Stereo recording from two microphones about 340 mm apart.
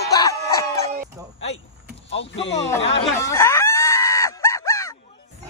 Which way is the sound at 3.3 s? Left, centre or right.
Centre.